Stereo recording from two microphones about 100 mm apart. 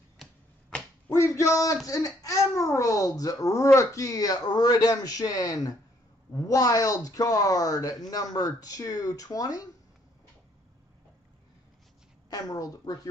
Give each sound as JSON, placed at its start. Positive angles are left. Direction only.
{"t": 1.1, "sound": "a child's voice", "side_deg": 30}
{"t": 12.3, "sound": "a child's voice", "side_deg": 35}